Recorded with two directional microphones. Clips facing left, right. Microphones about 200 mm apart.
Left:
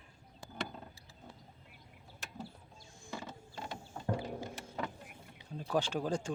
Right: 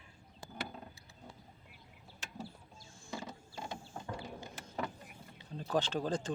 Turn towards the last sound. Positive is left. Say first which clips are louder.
# even
turn(degrees=10)  # may be behind; listen again after turning